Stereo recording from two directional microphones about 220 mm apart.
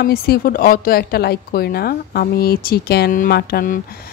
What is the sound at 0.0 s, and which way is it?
A woman's voice, 40° left (ahead or behind).